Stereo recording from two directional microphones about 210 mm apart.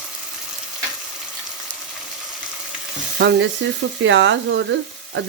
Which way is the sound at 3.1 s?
60° right (ahead or behind).